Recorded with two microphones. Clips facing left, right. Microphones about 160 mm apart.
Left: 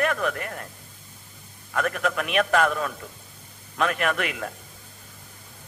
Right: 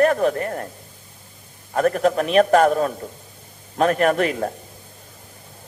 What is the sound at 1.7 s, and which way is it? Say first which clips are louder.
A man's voice: right 8 dB; 35° right (ahead or behind).